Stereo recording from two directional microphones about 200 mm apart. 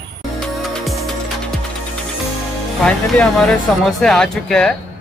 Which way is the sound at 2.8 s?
5° left (ahead or behind).